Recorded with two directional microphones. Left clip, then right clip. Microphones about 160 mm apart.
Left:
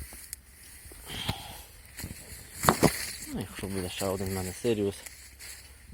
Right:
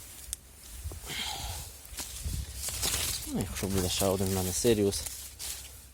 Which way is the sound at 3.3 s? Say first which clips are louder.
Right 3 dB; 25° right (ahead or behind).